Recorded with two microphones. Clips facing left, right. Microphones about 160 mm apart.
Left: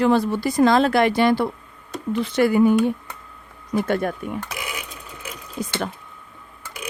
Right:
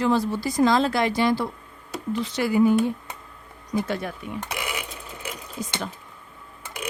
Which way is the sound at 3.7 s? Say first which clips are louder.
Left 5 dB; 55° left (ahead or behind).